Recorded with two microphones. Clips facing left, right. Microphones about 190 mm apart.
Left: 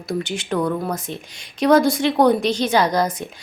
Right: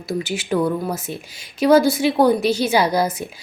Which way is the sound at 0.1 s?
5° right (ahead or behind).